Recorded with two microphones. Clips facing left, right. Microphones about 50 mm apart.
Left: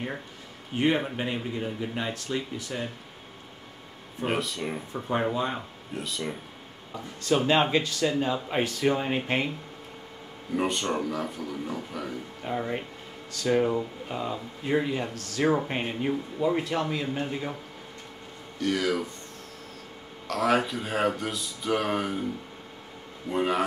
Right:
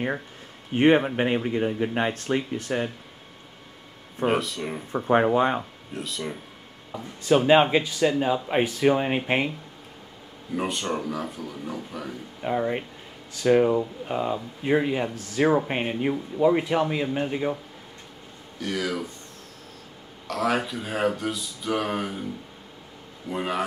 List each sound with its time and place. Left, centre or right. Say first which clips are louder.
0.7 s speech: right 6 dB; right
4.3 s speech: right 3 dB; centre
4.9 s speech: right 8 dB; right
5.9 s speech: right 1 dB; centre
7.2 s speech: right 5 dB; centre
10.5 s speech: even; centre
12.4 s speech: right 6 dB; centre
18.6 s speech: left 2 dB; centre
20.2 s speech: left 1 dB; centre
23.3 s speech: left 2 dB; centre